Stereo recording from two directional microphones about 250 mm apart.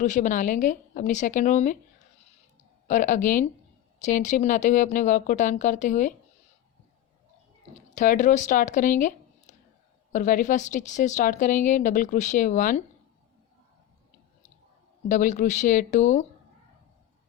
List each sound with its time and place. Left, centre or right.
0.0 s a woman's voice: left
2.8 s a woman's voice: left
7.9 s speech: left
15.1 s speech: left